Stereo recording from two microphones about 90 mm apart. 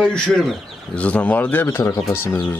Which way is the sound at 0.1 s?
5° left (ahead or behind).